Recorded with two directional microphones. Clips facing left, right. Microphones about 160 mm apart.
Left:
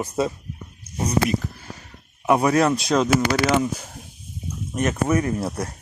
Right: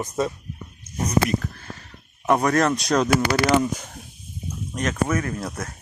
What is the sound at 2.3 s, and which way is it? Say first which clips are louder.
Speech: left 2 dB; 10° left (ahead or behind).